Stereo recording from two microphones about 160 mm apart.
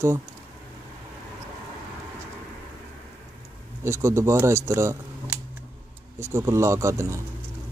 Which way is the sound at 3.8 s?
15° right (ahead or behind).